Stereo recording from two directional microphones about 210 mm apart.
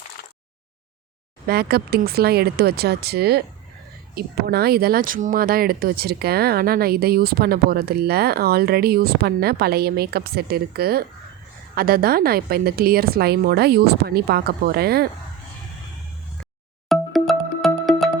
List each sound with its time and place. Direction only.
1.5 s speech: 45° right (ahead or behind)
16.9 s music: centre (ahead or behind)